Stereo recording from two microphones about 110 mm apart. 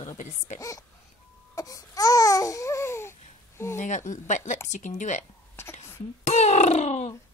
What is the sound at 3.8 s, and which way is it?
Speech, 90° left.